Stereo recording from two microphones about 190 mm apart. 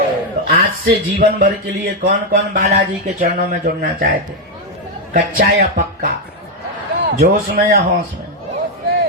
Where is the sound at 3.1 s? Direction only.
50° right (ahead or behind).